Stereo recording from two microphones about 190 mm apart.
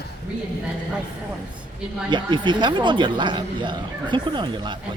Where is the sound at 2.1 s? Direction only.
25° right (ahead or behind).